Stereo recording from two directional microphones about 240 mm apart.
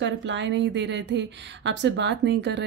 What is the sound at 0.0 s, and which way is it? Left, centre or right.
A woman's voice, right.